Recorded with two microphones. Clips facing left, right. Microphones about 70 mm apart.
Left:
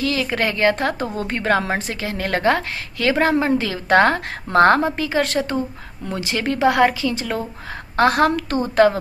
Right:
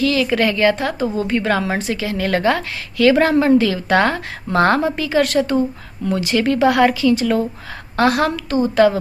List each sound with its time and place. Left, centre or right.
0.0 s a woman's voice: left